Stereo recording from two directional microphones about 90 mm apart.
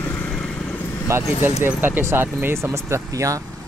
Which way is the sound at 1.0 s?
25° right (ahead or behind).